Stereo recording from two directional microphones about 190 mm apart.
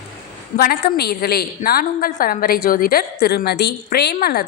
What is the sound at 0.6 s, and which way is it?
A woman's voice, 50° left (ahead or behind).